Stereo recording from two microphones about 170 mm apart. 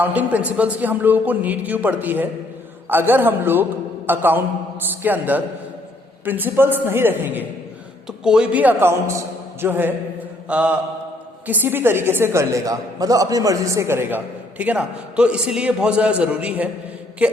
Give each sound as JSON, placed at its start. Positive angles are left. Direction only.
{"t": 0.0, "sound": "a woman's voice", "side_deg": -10}